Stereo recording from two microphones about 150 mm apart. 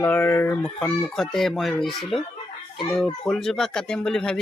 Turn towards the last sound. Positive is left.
turn(degrees=5)  # may be behind; listen again after turning